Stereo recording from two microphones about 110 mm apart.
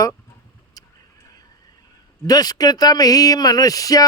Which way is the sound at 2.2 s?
35° left (ahead or behind).